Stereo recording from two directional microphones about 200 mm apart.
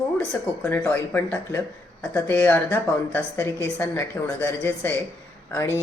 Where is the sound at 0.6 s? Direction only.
10° left (ahead or behind).